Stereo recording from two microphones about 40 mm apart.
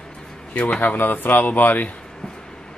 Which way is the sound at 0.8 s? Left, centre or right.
Left.